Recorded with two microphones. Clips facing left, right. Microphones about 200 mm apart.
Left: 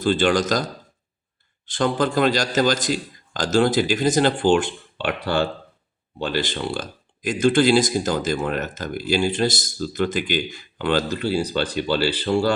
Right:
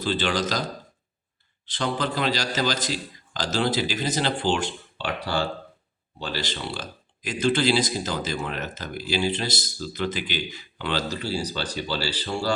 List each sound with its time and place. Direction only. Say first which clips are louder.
0.0 s speech: left 6 dB; 50° left (ahead or behind)
1.6 s speech: left 6 dB; 50° left (ahead or behind)